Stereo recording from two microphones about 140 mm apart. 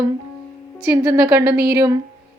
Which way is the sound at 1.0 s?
30° right (ahead or behind).